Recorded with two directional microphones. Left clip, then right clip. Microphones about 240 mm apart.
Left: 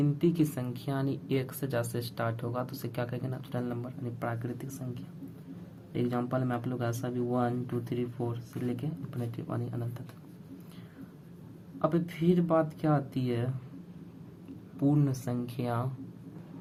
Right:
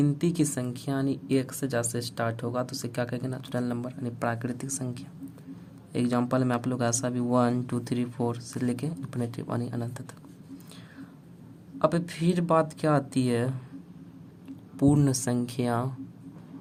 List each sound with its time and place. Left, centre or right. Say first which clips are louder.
0.0 s speech: right 2 dB; right
5.9 s speech: right 5 dB; right
11.8 s speech: right 4 dB; right
14.8 s speech: right 5 dB; right